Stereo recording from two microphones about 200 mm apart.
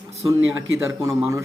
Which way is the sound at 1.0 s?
15° right (ahead or behind).